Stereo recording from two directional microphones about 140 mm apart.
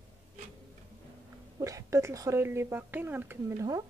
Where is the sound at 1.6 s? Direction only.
25° right (ahead or behind).